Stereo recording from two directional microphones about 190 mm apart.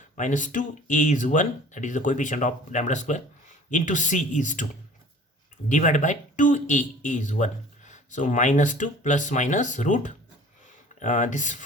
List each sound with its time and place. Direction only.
0.2 s speech: 40° left (ahead or behind)
5.6 s speech: 40° left (ahead or behind)